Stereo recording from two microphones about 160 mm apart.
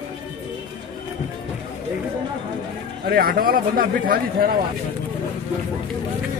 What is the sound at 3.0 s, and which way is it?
A man's voice, 70° right (ahead or behind).